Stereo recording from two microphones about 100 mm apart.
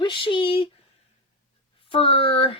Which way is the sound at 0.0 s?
55° left (ahead or behind).